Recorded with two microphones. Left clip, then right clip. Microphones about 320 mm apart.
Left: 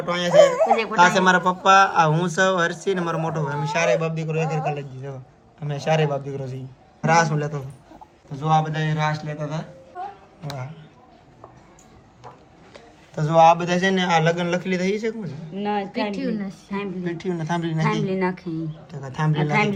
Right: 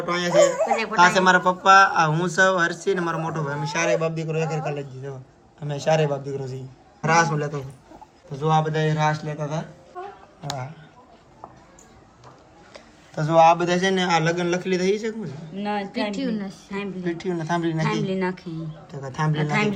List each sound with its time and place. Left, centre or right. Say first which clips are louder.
0.0 s speech: left 3 dB; centre
0.6 s a woman's voice: left 3 dB; centre
0.9 s a man's voice: right 1 dB; centre
12.7 s a man's voice: right 1 dB; centre
15.5 s a woman's voice: left 2 dB; centre
17.0 s speech: right 1 dB; centre
18.0 s speech: left 2 dB; centre
19.1 s speech: even; centre
19.4 s a woman's voice: left 3 dB; centre